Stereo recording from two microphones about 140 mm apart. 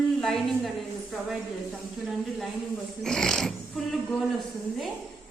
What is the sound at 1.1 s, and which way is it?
Speech, 5° left (ahead or behind).